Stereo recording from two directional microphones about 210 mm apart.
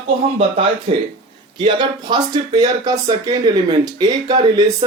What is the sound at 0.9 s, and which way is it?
Speech, 25° right (ahead or behind).